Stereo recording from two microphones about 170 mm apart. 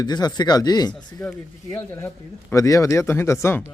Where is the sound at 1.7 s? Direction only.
10° left (ahead or behind).